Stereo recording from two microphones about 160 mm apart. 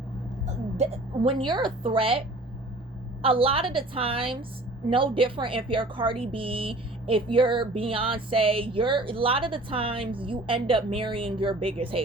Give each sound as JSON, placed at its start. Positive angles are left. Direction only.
{"t": 0.4, "sound": "a woman's voice", "side_deg": -40}